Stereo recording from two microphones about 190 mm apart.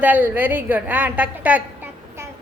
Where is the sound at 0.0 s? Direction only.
10° right (ahead or behind).